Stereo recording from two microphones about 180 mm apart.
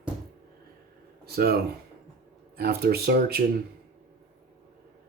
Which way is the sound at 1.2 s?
60° right (ahead or behind).